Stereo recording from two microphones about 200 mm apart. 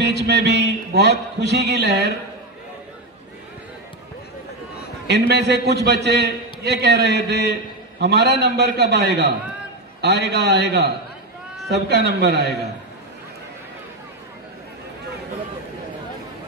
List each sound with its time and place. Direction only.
0.0 s a man's voice: 60° right (ahead or behind)
5.0 s a man's voice: 55° right (ahead or behind)